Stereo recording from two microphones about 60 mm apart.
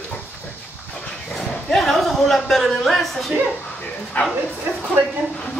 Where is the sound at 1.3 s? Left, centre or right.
Centre.